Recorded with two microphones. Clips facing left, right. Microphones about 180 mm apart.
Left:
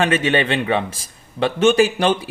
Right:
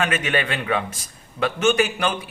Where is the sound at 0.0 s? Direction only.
30° left (ahead or behind).